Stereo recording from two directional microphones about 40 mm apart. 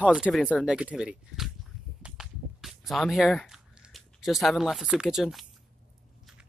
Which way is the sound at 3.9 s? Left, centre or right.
Centre.